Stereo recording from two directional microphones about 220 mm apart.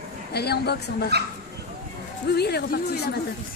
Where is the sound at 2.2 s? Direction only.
45° left (ahead or behind).